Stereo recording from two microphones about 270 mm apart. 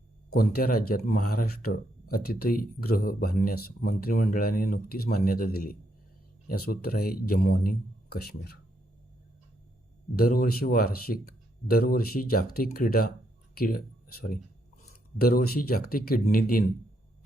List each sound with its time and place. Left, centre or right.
0.3 s speech: left
10.2 s speech: left